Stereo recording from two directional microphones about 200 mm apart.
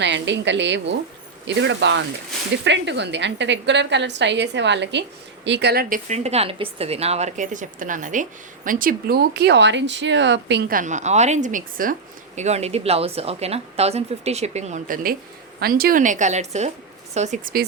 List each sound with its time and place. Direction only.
0.0 s a woman's voice: 60° right (ahead or behind); by 17.7 s 45° right (ahead or behind)